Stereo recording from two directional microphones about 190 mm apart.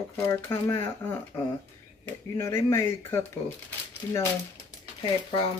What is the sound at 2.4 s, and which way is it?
Speech, 15° left (ahead or behind).